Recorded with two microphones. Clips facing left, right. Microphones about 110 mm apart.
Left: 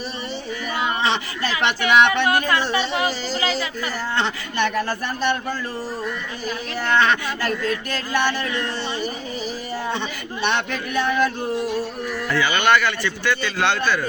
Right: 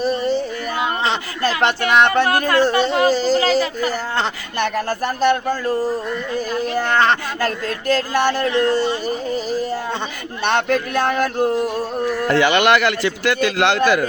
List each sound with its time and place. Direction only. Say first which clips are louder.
0.0 s speech: right 11 dB; 45° right (ahead or behind)
6.7 s speech: right 1 dB; 45° right (ahead or behind)
10.4 s speech: right 6 dB; 50° right (ahead or behind)
12.3 s speech: right 4 dB; 70° right (ahead or behind)
13.6 s a man's voice: right 5 dB; 90° right